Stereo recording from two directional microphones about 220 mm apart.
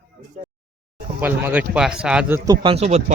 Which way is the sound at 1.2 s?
5° right (ahead or behind).